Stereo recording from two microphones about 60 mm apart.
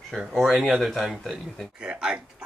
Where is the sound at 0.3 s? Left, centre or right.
Centre.